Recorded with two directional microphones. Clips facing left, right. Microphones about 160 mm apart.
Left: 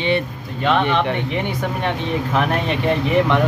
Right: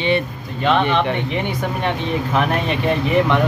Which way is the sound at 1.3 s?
20° right (ahead or behind).